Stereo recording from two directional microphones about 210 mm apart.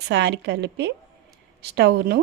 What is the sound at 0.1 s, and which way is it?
Speech, 55° right (ahead or behind).